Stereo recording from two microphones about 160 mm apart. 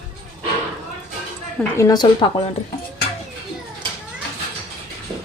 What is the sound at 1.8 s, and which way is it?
Speech, 25° left (ahead or behind).